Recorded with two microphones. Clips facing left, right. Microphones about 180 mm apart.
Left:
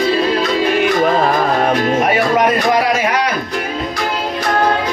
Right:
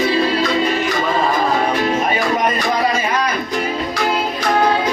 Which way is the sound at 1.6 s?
70° left (ahead or behind).